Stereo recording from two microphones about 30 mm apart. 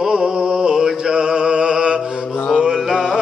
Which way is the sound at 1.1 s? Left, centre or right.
Right.